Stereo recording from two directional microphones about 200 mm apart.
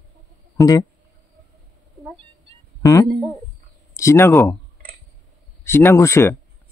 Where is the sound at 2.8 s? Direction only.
15° left (ahead or behind).